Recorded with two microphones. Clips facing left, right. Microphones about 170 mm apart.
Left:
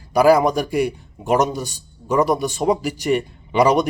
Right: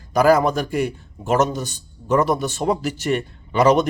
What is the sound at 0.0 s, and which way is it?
A man's voice, 10° left (ahead or behind).